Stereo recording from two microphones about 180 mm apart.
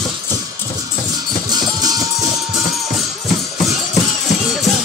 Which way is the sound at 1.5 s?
20° right (ahead or behind).